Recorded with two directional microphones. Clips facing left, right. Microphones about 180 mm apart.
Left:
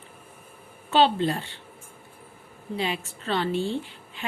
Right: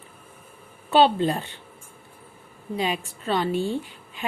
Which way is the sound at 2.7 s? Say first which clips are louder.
Right 2 dB; 15° right (ahead or behind).